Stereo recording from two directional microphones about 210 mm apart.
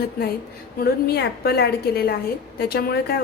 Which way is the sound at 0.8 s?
45° left (ahead or behind).